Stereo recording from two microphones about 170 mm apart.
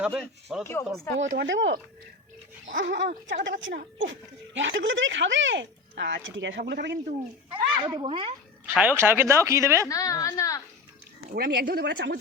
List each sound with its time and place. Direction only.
0.0 s speech: 5° right (ahead or behind)
0.6 s speech: 15° left (ahead or behind)
1.3 s speech: 90° right
3.5 s speech: 55° right (ahead or behind)
4.0 s speech: 90° right; by 7.0 s 75° right (ahead or behind)
7.5 s speech: 25° right (ahead or behind)
8.6 s speech: 10° right (ahead or behind)
9.9 s a woman's voice: 20° left (ahead or behind)
11.3 s speech: 65° right (ahead or behind); by 12.1 s 90° right